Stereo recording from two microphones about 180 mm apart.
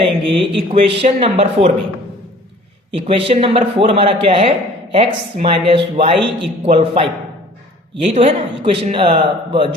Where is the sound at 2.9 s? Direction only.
30° right (ahead or behind).